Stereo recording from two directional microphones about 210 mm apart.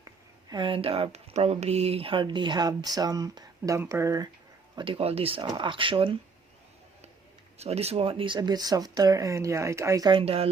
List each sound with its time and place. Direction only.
0.5 s speech: 25° right (ahead or behind)
7.6 s speech: 30° right (ahead or behind)